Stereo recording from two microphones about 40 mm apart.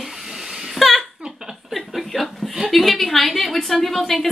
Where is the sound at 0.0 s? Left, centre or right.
Centre.